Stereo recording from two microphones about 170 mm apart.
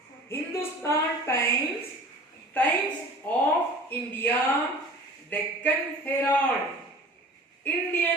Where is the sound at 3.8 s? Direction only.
10° left (ahead or behind).